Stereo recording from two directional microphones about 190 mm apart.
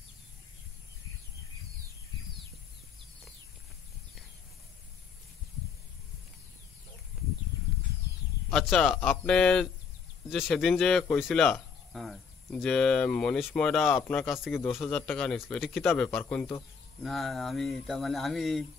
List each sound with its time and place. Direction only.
8.5 s speech: centre (ahead or behind)
15.8 s a man's voice: 10° left (ahead or behind)